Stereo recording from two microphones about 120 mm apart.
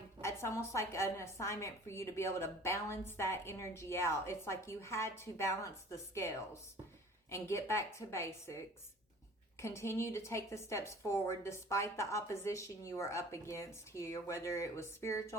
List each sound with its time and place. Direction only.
0.2 s a woman's voice: 20° left (ahead or behind)
9.6 s a woman's voice: 20° left (ahead or behind)